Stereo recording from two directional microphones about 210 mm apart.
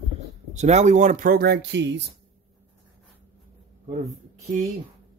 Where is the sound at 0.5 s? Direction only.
35° right (ahead or behind); by 2.0 s 55° right (ahead or behind).